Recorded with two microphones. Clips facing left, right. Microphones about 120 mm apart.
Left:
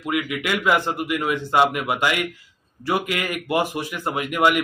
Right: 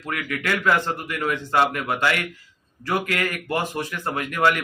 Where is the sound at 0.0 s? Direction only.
15° left (ahead or behind).